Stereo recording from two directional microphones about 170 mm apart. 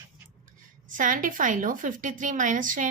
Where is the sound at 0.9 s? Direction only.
50° right (ahead or behind).